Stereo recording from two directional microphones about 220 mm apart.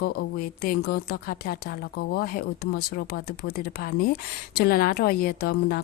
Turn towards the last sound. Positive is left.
turn(degrees=45)  # may be behind; listen again after turning